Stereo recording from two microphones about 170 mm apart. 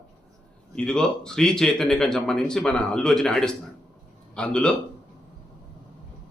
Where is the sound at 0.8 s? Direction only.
5° left (ahead or behind).